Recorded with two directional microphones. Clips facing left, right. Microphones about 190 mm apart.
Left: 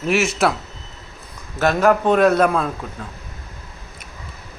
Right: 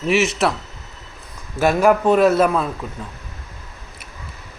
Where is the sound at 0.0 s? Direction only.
Centre (ahead or behind).